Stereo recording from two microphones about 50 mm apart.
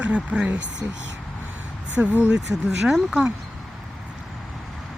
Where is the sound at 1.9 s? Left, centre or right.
Right.